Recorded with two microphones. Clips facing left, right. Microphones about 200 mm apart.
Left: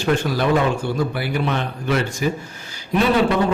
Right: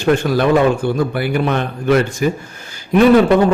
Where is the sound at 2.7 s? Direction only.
50° right (ahead or behind).